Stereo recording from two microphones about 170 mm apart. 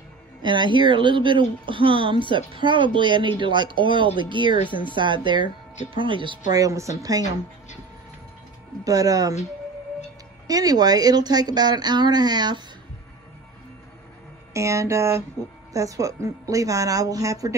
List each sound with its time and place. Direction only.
0.4 s speech: 25° right (ahead or behind)
6.5 s speech: 20° right (ahead or behind)
8.8 s speech: 20° right (ahead or behind)
10.4 s speech: 20° right (ahead or behind)
14.5 s speech: 15° right (ahead or behind)